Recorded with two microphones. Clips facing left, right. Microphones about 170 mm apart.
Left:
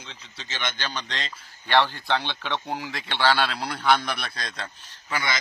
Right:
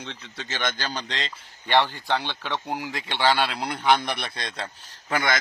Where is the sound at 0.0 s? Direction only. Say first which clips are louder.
Right 6 dB; 65° right (ahead or behind); by 1.3 s 30° right (ahead or behind).